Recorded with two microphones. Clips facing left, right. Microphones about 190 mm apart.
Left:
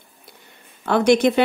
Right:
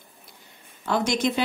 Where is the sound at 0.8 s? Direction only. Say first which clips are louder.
Left 8 dB; 60° left (ahead or behind).